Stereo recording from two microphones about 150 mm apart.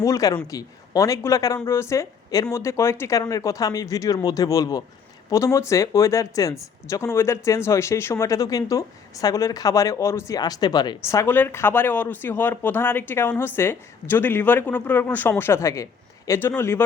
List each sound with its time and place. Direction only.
0.0 s speech: 25° left (ahead or behind)